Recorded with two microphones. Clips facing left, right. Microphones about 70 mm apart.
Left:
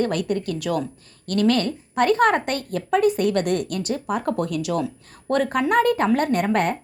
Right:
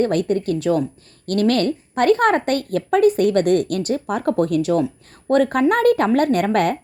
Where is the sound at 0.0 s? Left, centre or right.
Right.